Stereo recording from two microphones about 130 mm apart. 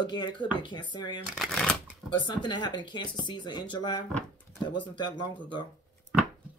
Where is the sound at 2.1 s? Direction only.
35° left (ahead or behind).